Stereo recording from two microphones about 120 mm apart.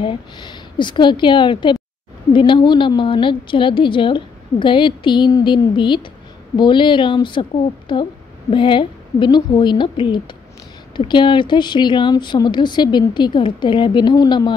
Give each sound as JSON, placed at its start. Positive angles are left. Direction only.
{"t": 0.0, "sound": "a woman's voice", "side_deg": 40}